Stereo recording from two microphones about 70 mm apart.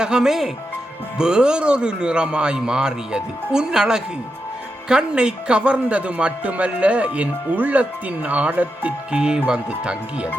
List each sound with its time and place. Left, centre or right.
0.0 s a man's voice: centre